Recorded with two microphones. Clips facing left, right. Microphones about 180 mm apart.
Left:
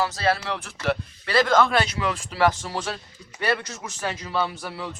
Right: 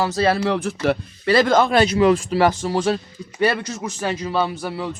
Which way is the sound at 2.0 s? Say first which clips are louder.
Right 8 dB; 35° right (ahead or behind).